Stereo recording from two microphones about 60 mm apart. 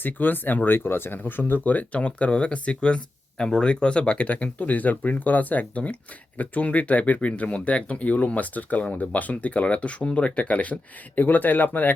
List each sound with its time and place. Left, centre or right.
0.0 s speech: left